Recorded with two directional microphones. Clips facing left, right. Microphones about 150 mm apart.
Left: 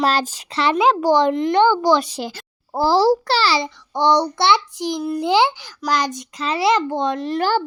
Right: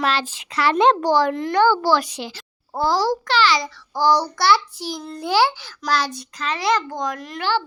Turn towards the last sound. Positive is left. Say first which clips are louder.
# left 7 dB
turn(degrees=30)  # may be behind; listen again after turning